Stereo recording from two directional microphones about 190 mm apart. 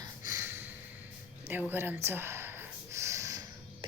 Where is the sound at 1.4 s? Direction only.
10° right (ahead or behind).